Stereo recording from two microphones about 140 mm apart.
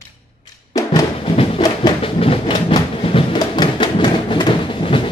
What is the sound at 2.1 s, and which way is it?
Train, 40° left (ahead or behind).